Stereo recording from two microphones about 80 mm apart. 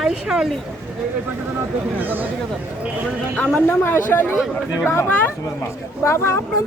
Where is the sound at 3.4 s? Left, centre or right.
Left.